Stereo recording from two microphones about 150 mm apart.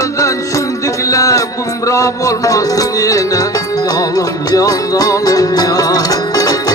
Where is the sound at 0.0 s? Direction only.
20° left (ahead or behind).